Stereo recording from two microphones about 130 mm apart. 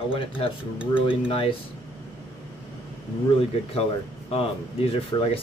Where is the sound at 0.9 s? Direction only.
45° left (ahead or behind).